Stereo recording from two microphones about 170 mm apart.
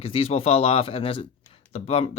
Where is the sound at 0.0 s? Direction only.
35° left (ahead or behind).